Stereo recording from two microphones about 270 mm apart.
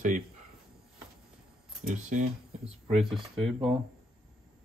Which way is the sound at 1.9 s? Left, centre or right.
Right.